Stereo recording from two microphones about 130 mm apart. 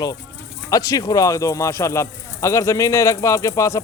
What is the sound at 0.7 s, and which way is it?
A man's voice, 25° left (ahead or behind).